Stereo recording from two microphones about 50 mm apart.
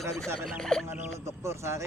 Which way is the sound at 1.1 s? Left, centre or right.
Right.